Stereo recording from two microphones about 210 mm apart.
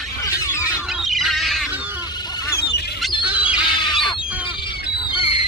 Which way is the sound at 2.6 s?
50° left (ahead or behind).